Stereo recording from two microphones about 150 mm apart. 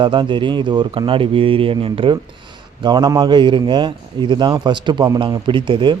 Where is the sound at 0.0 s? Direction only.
30° right (ahead or behind).